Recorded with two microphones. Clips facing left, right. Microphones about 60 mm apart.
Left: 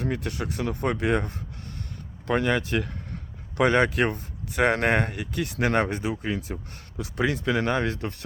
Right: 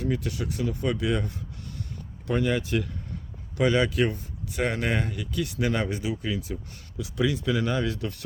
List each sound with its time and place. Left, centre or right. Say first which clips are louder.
0.0 s speech: even; left
7.9 s speech: even; left